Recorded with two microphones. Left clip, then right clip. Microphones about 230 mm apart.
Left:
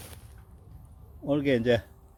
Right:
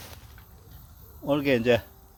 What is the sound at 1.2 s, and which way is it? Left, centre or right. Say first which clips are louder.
Speech: right 2 dB; centre.